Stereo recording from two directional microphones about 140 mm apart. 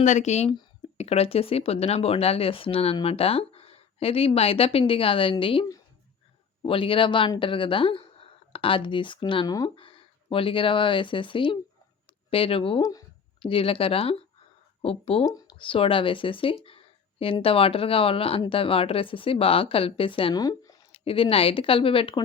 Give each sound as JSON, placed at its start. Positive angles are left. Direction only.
{"t": 0.0, "sound": "speech", "side_deg": 55}
{"t": 15.2, "sound": "speech", "side_deg": 25}
{"t": 15.5, "sound": "speech", "side_deg": 40}
{"t": 16.6, "sound": "a sound", "side_deg": 40}
{"t": 17.4, "sound": "speech", "side_deg": 40}
{"t": 20.4, "sound": "a sound", "side_deg": 25}
{"t": 20.9, "sound": "speech", "side_deg": 40}